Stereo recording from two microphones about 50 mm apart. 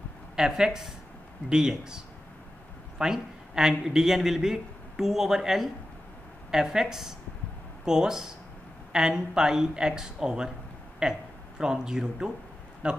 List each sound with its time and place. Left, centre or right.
0.4 s a man's voice: centre